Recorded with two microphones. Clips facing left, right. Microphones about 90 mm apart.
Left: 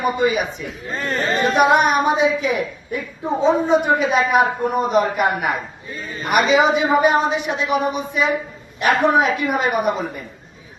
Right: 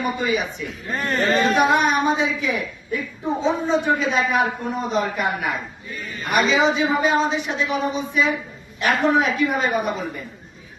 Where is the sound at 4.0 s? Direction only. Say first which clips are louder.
Left 4 dB; 50° left (ahead or behind).